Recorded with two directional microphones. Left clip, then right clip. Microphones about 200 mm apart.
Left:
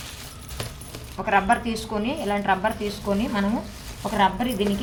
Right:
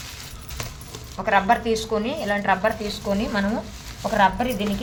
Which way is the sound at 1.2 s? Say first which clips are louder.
Right 2 dB; 40° right (ahead or behind).